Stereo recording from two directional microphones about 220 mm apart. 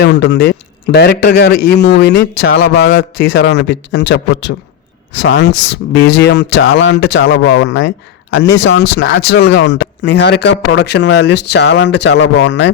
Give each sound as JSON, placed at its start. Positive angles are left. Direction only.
{"t": 0.0, "sound": "a man's voice", "side_deg": 50}
{"t": 5.2, "sound": "a man's voice", "side_deg": 55}